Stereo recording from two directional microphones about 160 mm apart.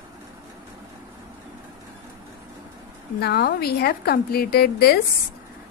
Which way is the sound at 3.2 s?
90° left.